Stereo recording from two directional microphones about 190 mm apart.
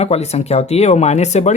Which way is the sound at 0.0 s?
35° left (ahead or behind).